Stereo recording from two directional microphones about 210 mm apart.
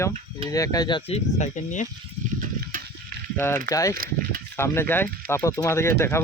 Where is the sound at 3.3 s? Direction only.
10° left (ahead or behind).